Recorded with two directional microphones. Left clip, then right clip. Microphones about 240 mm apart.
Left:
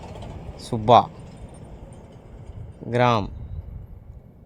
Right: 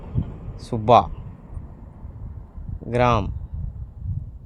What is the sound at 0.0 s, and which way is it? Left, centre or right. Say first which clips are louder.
Vehicle: right 2 dB; left.